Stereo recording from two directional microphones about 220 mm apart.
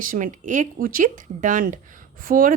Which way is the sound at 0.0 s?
35° right (ahead or behind).